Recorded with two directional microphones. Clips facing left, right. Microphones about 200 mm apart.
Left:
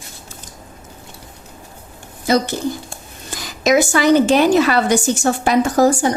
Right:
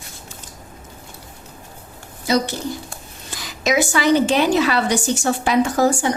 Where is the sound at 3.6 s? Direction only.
45° left (ahead or behind).